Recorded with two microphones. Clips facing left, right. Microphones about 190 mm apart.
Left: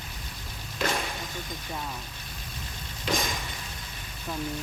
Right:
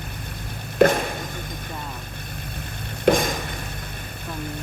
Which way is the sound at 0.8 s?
55° right (ahead or behind).